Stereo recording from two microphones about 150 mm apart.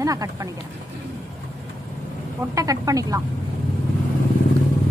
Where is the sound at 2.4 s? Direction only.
20° right (ahead or behind).